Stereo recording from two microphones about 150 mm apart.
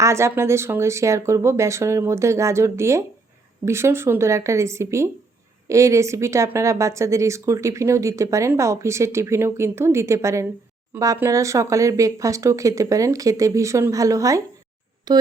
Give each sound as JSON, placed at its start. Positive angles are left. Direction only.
{"t": 0.0, "sound": "a woman's voice", "side_deg": -20}